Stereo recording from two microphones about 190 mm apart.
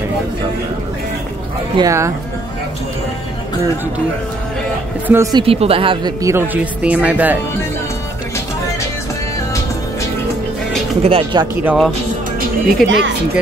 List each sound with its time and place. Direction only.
1.8 s speech: 15° right (ahead or behind)
5.0 s speech: 15° right (ahead or behind)
5.4 s speech: 30° right (ahead or behind)
6.2 s speech: 10° right (ahead or behind)
11.0 s speech: 30° right (ahead or behind)
11.6 s speech: 5° right (ahead or behind)
12.8 s speech: 75° right (ahead or behind)